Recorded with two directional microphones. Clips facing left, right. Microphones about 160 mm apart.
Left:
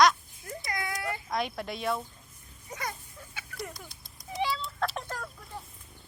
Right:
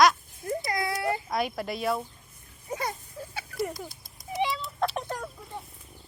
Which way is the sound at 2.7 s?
30° right (ahead or behind).